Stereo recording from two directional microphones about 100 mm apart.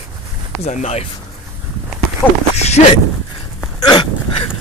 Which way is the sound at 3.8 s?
55° left (ahead or behind).